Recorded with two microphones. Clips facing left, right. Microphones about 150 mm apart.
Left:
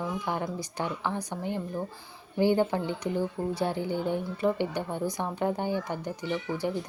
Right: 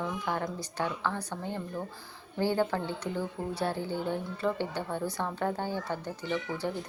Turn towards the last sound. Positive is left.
turn(degrees=15)  # may be behind; listen again after turning